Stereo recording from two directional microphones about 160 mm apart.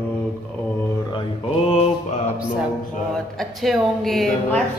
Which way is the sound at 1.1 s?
35° left (ahead or behind).